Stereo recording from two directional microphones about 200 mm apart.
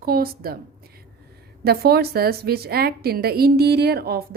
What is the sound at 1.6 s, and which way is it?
A woman's voice, 50° right (ahead or behind).